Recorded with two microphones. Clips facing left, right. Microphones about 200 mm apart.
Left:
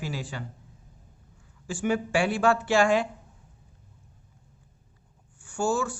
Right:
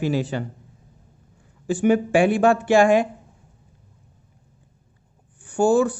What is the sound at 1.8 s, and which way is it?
Speech, 20° right (ahead or behind).